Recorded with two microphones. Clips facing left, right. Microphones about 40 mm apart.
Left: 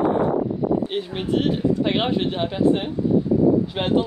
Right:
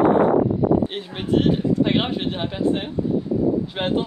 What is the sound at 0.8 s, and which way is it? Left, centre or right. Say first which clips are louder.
Speech: left 1 dB; centre.